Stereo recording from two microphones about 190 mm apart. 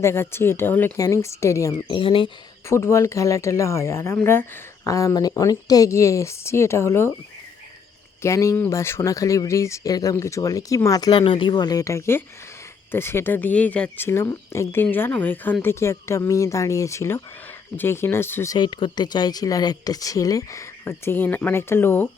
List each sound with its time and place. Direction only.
0.0 s speech: 15° left (ahead or behind)
2.0 s speech: 25° left (ahead or behind)
2.6 s speech: 15° left (ahead or behind)
8.2 s speech: 15° left (ahead or behind)